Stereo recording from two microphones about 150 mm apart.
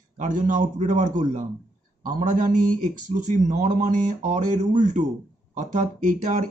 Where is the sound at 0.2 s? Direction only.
60° right (ahead or behind).